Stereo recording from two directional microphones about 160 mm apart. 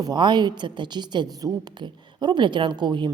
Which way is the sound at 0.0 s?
25° right (ahead or behind).